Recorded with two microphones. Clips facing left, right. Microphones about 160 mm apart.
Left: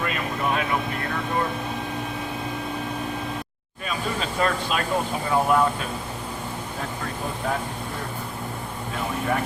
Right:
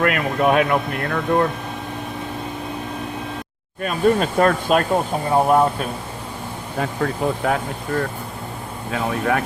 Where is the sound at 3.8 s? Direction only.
50° right (ahead or behind).